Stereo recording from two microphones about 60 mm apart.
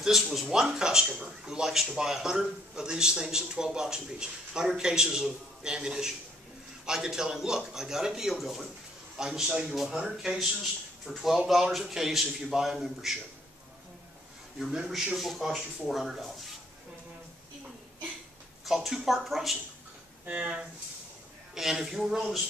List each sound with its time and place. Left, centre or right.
0.0 s a man's voice: centre
14.9 s a man's voice: centre
18.7 s a man's voice: centre
20.2 s speech: centre
21.5 s speech: centre